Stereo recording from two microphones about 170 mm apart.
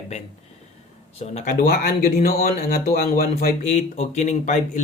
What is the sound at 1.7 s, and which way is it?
Speech, 60° left (ahead or behind).